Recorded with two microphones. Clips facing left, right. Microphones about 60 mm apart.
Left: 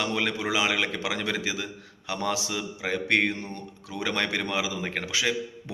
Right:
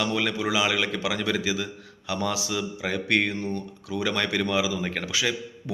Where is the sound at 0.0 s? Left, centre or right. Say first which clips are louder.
Right 2 dB; left.